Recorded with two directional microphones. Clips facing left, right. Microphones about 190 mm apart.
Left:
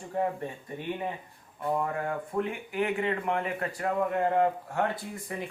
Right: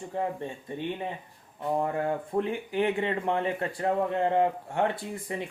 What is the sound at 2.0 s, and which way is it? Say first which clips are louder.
Speech: right 3 dB; 30° right (ahead or behind).